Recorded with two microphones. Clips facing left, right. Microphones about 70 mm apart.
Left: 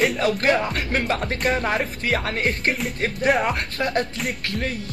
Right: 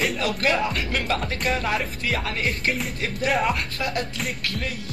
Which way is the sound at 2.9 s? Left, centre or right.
Left.